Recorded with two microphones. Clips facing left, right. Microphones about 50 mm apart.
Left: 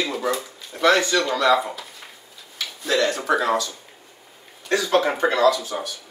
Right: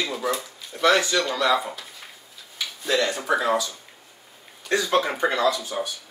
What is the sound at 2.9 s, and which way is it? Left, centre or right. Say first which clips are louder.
Speech: left 2 dB; centre.